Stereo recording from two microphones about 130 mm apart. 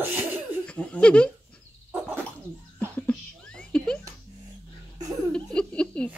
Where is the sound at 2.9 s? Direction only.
10° left (ahead or behind).